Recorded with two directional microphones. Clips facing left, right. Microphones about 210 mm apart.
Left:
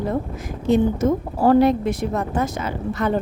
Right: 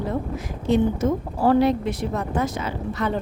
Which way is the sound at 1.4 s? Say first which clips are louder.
Left 3 dB; 45° left (ahead or behind).